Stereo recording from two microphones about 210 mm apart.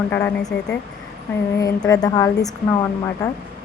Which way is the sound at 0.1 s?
10° left (ahead or behind).